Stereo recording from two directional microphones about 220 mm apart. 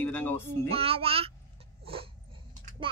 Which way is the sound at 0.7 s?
25° right (ahead or behind).